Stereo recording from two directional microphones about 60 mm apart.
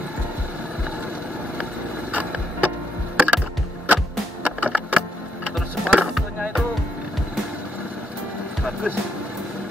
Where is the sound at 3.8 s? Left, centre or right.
Right.